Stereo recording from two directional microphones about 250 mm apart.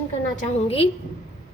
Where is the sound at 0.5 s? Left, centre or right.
Left.